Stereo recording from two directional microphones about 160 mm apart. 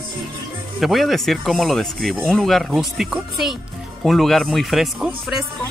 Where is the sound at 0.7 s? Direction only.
Centre (ahead or behind).